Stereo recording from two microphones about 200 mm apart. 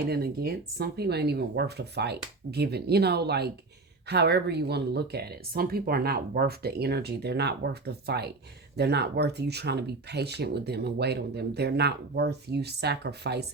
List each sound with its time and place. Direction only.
0.0 s speech: 50° right (ahead or behind)